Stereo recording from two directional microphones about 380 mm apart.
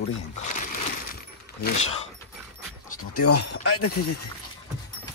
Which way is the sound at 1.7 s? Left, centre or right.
Centre.